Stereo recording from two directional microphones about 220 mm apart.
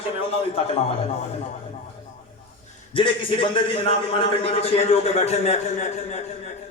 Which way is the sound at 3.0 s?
25° left (ahead or behind).